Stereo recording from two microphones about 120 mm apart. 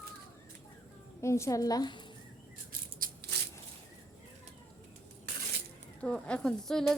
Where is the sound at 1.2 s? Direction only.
25° left (ahead or behind).